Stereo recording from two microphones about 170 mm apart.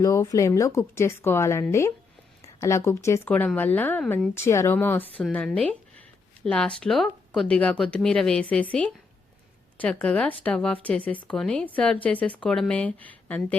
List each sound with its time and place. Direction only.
0.0 s speech: 20° left (ahead or behind)
4.4 s speech: 15° left (ahead or behind)